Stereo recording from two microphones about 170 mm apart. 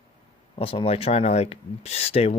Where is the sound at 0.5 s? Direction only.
35° left (ahead or behind).